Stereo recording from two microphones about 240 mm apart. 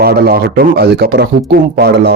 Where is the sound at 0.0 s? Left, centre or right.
Right.